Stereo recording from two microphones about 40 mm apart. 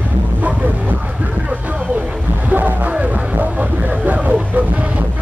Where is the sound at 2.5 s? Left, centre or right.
Right.